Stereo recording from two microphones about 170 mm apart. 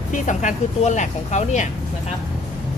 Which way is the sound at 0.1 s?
45° left (ahead or behind).